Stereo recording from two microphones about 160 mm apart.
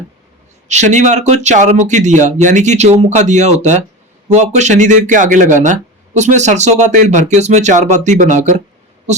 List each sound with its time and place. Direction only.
0.7 s speech: 50° right (ahead or behind)